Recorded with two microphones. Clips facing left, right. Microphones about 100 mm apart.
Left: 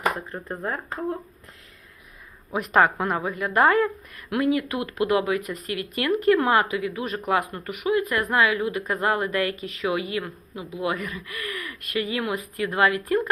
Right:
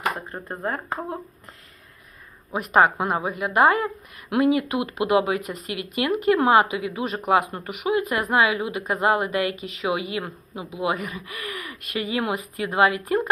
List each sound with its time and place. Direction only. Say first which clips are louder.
0.3 s a woman's voice: right 1 dB; 10° right (ahead or behind)
2.5 s a woman's voice: right 1 dB; 5° right (ahead or behind)
4.3 s speech: right 3 dB; 20° right (ahead or behind)